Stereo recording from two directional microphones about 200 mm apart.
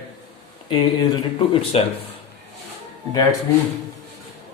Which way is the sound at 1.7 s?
30° left (ahead or behind).